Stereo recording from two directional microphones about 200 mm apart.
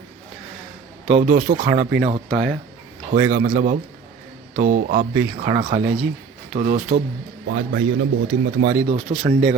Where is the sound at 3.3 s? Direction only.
45° right (ahead or behind).